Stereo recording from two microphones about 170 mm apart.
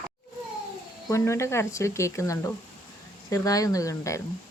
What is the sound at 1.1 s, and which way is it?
Speech, 15° left (ahead or behind).